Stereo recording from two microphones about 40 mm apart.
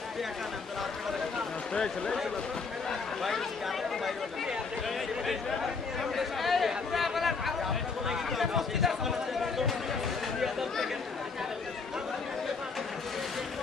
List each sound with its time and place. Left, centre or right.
1.7 s speech: centre
5.2 s chatter: centre
6.0 s a sound: centre